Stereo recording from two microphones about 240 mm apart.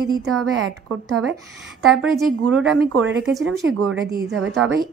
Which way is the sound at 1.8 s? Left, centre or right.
Centre.